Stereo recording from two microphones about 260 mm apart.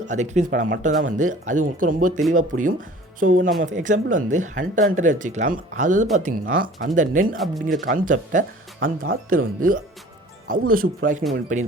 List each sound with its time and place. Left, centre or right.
0.1 s speech: right
7.4 s speech: centre
7.9 s speech: right